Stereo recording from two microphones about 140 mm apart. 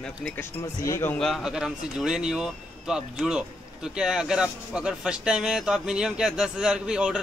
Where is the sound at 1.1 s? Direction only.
Centre (ahead or behind).